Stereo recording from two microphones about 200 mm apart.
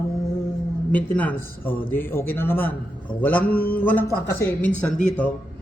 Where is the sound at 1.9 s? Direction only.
10° left (ahead or behind).